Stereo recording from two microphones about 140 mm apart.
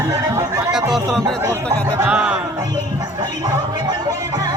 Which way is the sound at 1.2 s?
25° right (ahead or behind).